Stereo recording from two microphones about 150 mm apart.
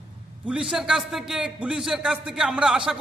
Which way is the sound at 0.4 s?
5° right (ahead or behind).